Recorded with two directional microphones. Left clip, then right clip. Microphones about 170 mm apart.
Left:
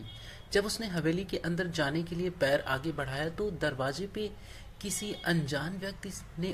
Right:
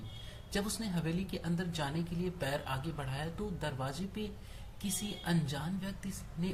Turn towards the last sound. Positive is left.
turn(degrees=40)  # may be behind; listen again after turning